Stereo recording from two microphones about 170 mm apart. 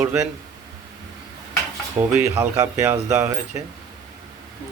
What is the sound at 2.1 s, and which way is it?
Speech, 15° right (ahead or behind).